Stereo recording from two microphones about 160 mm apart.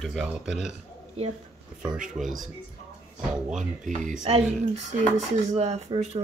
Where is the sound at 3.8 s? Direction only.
55° right (ahead or behind).